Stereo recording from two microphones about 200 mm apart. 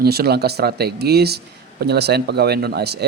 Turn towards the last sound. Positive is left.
turn(degrees=-55)  # may be behind; listen again after turning